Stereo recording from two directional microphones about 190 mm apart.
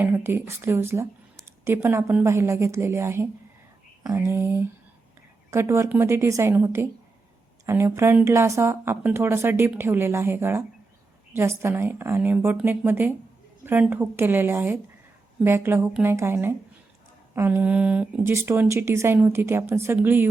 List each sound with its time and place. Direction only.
0.0 s speech: 10° right (ahead or behind)
4.3 s a woman's voice: 10° right (ahead or behind)